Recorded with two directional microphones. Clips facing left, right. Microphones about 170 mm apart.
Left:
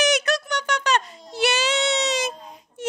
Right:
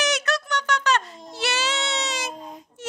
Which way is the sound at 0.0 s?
15° left (ahead or behind).